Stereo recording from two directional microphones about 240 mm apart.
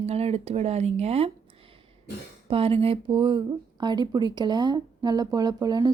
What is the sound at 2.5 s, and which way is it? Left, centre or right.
Speech, right.